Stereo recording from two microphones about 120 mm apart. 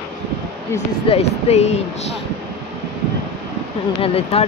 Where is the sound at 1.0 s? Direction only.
60° left (ahead or behind).